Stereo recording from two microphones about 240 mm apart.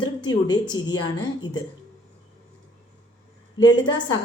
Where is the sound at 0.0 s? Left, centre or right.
Centre.